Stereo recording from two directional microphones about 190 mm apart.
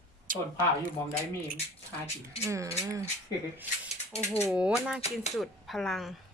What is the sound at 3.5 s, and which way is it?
Speech, 10° right (ahead or behind).